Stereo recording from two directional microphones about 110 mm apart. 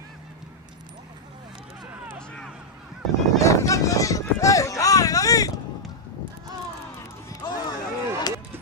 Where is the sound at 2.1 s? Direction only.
10° left (ahead or behind).